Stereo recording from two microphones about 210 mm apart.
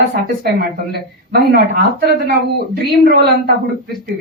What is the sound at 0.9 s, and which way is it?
Speech, 50° right (ahead or behind).